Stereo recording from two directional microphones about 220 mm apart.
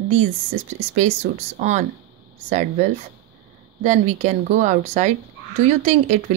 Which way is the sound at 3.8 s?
30° right (ahead or behind).